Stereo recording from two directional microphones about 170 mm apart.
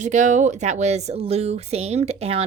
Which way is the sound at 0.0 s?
45° right (ahead or behind).